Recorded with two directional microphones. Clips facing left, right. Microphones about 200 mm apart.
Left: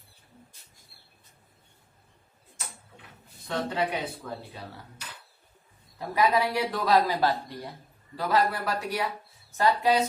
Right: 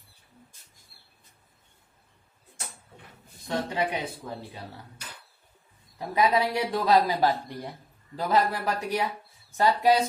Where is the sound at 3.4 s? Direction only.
15° right (ahead or behind).